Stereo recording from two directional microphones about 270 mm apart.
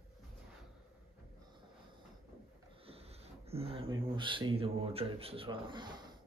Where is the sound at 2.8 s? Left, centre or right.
Right.